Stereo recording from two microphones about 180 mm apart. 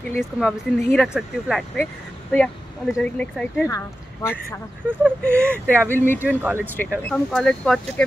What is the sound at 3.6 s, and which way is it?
Speech, 20° left (ahead or behind).